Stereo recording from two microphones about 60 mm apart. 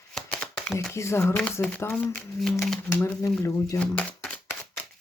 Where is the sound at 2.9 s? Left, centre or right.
Left.